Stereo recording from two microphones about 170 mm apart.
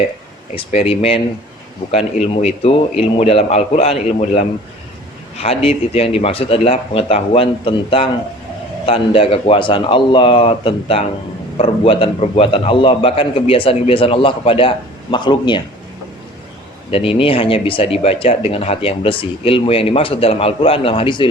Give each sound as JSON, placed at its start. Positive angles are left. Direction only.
{"t": 0.5, "sound": "speech", "side_deg": 35}
{"t": 16.9, "sound": "speech", "side_deg": 35}